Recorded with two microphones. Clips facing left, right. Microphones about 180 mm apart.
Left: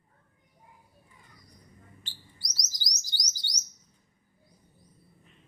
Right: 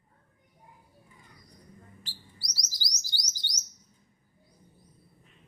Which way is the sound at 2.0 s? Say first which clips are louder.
Right 2 dB; 20° left (ahead or behind).